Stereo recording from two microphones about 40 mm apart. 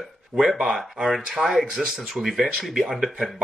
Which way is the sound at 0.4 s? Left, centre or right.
Centre.